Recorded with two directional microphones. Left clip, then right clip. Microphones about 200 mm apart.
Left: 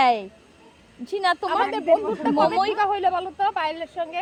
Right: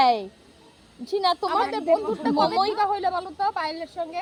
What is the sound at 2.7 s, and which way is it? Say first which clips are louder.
Speech: left 2 dB; 20° left (ahead or behind).